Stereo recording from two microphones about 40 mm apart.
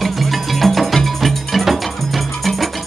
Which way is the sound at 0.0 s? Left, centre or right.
Centre.